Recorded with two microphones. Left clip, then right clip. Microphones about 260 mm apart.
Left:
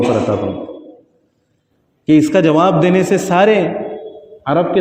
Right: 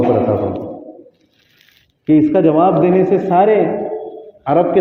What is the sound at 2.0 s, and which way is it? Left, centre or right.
A man's voice, left.